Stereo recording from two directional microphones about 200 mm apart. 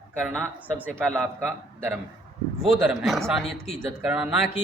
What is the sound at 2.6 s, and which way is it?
Speech, centre (ahead or behind).